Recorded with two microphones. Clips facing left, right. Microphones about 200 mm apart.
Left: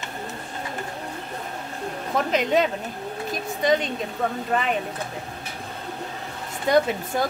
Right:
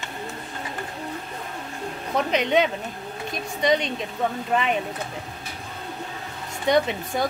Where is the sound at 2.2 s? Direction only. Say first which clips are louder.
Even; centre (ahead or behind).